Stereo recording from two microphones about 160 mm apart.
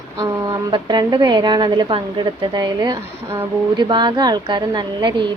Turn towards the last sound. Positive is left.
turn(degrees=-30)  # may be behind; listen again after turning